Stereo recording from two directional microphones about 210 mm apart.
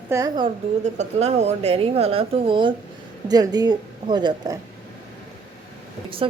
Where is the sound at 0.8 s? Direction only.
30° right (ahead or behind).